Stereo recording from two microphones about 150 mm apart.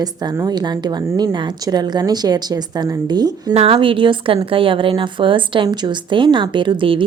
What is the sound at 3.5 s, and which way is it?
A woman's voice, 40° right (ahead or behind).